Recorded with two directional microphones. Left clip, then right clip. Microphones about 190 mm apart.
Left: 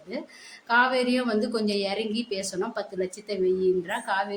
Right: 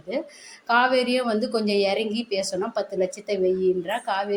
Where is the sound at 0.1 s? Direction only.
15° right (ahead or behind).